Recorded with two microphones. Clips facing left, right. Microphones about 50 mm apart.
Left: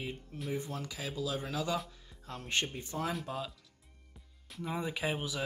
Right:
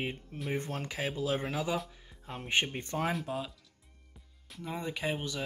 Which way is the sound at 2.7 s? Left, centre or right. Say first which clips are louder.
Right 3 dB; right.